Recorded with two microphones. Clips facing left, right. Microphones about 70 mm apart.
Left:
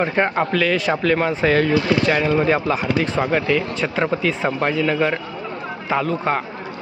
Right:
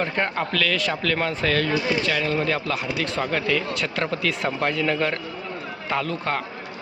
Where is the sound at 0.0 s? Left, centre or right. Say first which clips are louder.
Left 6 dB; centre.